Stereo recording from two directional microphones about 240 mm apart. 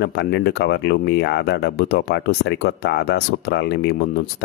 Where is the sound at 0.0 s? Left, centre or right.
Left.